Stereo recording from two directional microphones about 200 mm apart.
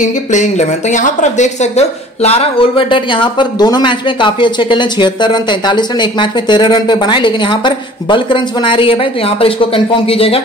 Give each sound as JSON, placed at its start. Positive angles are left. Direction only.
{"t": 0.0, "sound": "speech", "side_deg": 35}